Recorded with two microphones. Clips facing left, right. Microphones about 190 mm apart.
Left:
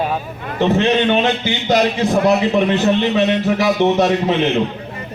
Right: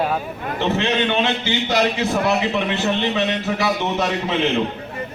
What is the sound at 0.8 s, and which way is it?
A man's voice, 40° left (ahead or behind).